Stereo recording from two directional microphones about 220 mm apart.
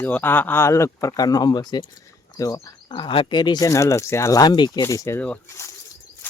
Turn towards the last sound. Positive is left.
turn(degrees=10)  # may be behind; listen again after turning